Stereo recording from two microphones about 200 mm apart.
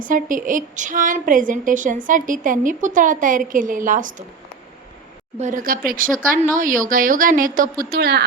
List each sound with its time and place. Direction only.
0.0 s a woman's voice: 40° right (ahead or behind)
5.4 s a woman's voice: 40° right (ahead or behind)